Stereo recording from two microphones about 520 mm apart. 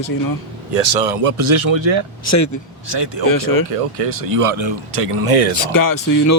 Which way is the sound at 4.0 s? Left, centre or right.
Right.